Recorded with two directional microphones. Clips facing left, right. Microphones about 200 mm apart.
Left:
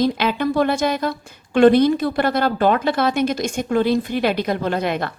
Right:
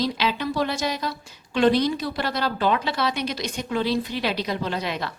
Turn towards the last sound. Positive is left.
turn(degrees=55)  # may be behind; listen again after turning